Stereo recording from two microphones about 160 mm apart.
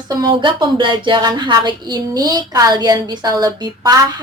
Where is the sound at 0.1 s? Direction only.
25° right (ahead or behind).